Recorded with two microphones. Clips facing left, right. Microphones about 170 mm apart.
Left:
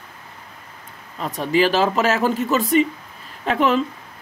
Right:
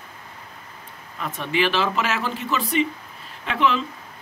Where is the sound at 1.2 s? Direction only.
35° left (ahead or behind).